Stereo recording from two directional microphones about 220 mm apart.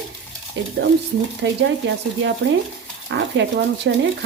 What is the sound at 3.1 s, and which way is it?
A woman's voice, 55° right (ahead or behind).